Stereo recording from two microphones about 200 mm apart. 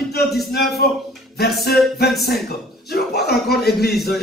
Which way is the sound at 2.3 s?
50° left (ahead or behind).